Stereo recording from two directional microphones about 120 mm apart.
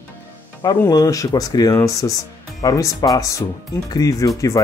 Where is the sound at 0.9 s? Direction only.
30° left (ahead or behind).